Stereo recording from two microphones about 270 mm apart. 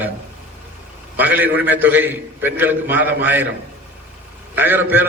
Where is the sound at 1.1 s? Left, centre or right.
Centre.